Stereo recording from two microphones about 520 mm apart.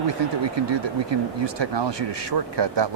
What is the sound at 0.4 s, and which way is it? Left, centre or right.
Speech, right.